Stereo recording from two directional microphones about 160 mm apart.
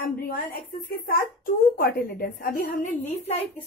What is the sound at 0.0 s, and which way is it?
A woman's voice, 60° left (ahead or behind).